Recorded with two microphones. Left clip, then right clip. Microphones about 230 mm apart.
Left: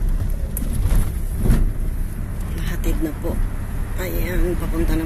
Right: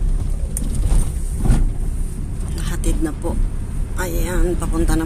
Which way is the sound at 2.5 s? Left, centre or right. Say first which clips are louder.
Right 2 dB; centre.